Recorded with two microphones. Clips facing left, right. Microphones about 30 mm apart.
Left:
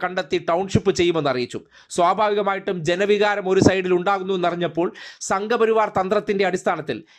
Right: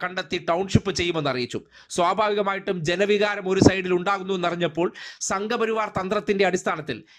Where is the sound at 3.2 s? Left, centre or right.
Left.